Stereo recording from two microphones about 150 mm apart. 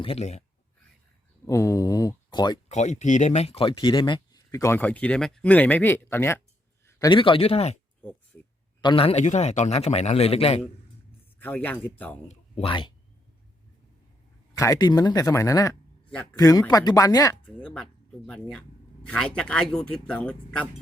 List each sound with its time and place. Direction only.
0.0 s a man's voice: 40° left (ahead or behind)
1.5 s speech: 20° left (ahead or behind)
2.6 s speech: 50° left (ahead or behind); by 6.4 s 15° left (ahead or behind)
7.1 s speech: 35° left (ahead or behind)
8.8 s speech: 35° left (ahead or behind)
9.2 s a man's voice: 50° left (ahead or behind)
11.3 s speech: 10° left (ahead or behind)
12.3 s speech: 40° left (ahead or behind)
14.5 s speech: 25° left (ahead or behind)
17.4 s speech: 5° left (ahead or behind)